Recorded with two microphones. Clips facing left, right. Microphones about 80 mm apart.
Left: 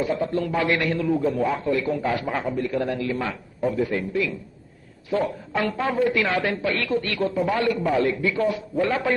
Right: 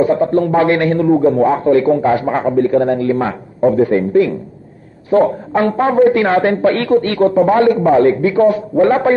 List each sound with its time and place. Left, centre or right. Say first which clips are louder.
0.0 s a woman's voice: right 11 dB; right